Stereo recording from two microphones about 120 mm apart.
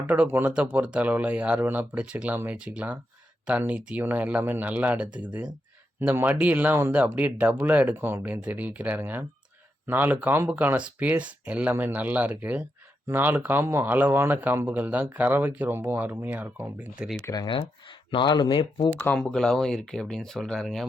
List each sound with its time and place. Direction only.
0.1 s speech: 15° right (ahead or behind)
17.2 s speech: 35° left (ahead or behind)
18.9 s speech: 15° left (ahead or behind)
19.2 s speech: 5° left (ahead or behind)